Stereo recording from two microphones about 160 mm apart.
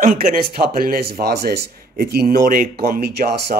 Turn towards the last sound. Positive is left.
turn(degrees=-90)